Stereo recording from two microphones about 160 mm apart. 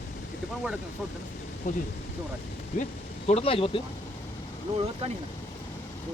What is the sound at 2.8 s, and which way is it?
Speech, 40° left (ahead or behind).